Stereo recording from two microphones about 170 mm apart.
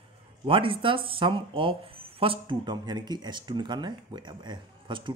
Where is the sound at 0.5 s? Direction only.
30° right (ahead or behind).